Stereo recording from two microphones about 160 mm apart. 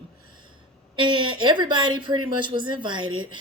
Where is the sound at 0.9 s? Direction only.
30° right (ahead or behind).